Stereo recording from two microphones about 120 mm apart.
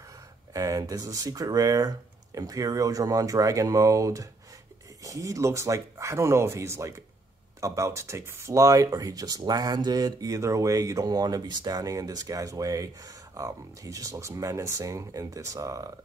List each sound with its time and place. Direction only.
0.5 s speech: 30° right (ahead or behind)